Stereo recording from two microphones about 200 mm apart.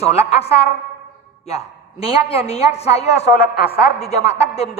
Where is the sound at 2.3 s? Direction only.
30° left (ahead or behind).